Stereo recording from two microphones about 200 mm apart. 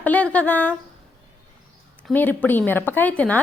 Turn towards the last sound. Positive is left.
turn(degrees=5)  # may be behind; listen again after turning